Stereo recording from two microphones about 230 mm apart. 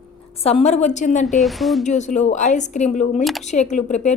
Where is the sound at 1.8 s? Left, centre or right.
Left.